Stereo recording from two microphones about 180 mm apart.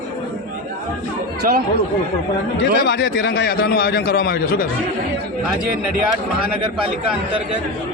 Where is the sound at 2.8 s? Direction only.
90° left.